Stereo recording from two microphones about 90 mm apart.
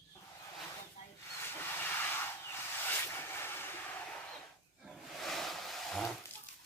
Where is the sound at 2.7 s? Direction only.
25° left (ahead or behind).